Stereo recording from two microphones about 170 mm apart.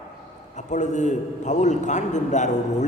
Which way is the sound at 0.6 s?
45° left (ahead or behind).